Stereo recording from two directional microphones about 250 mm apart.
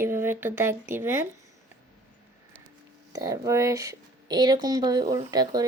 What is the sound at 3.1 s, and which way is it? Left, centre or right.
Speech, centre.